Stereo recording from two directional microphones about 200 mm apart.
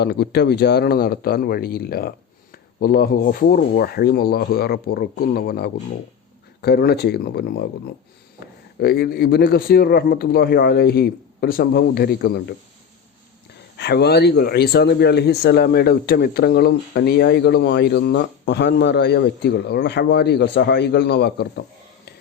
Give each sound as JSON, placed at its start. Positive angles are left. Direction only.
{"t": 0.0, "sound": "speech", "side_deg": 55}
{"t": 8.8, "sound": "speech", "side_deg": 50}
{"t": 13.7, "sound": "speech", "side_deg": 55}